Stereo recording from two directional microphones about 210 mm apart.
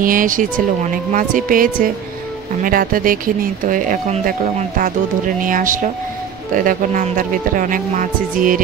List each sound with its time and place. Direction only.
0.0 s speech: 40° right (ahead or behind)